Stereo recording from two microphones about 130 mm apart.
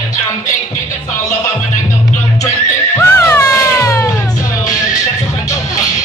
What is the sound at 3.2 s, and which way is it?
Cat, 20° left (ahead or behind).